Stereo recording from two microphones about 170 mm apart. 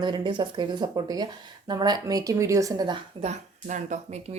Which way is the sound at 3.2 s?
45° right (ahead or behind).